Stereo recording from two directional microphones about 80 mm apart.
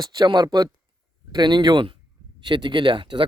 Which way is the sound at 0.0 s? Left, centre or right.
Right.